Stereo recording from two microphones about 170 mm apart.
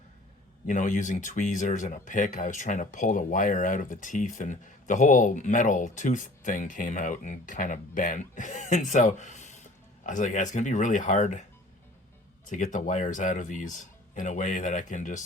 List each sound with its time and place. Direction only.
0.7 s speech: 50° left (ahead or behind)
12.5 s speech: 50° left (ahead or behind)